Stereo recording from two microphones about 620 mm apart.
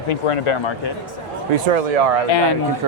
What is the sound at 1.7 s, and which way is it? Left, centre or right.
Speech, right.